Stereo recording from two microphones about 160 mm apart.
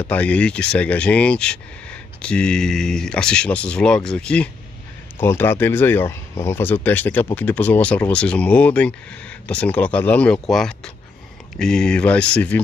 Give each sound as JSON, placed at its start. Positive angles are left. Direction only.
{"t": 0.1, "sound": "speech", "side_deg": 10}